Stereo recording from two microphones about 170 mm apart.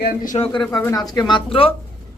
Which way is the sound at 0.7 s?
15° left (ahead or behind).